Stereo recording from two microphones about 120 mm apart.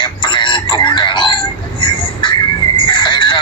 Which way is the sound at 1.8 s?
40° left (ahead or behind).